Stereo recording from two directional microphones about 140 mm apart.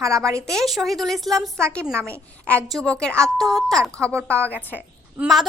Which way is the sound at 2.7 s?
Centre (ahead or behind).